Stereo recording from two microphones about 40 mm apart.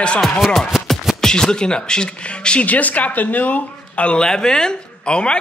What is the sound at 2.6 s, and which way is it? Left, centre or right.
Speech, left.